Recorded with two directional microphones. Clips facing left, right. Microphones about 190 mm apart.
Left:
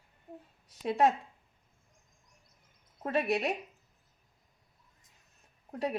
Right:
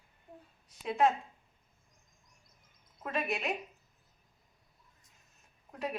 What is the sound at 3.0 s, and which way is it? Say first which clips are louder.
Speech: left 5 dB; 35° left (ahead or behind).